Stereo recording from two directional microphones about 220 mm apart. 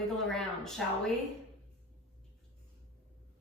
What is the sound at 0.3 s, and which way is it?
Speech, centre (ahead or behind).